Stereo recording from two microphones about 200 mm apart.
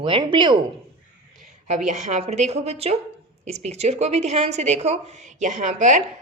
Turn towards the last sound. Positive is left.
turn(degrees=-35)  # may be behind; listen again after turning